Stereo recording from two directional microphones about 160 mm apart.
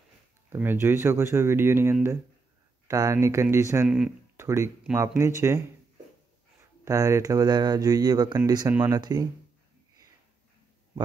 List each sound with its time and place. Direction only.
0.5 s speech: 15° right (ahead or behind)
3.8 s speech: 5° right (ahead or behind)
4.4 s a sound: 15° right (ahead or behind)
4.9 s speech: 20° right (ahead or behind)
6.8 s speech: 20° right (ahead or behind)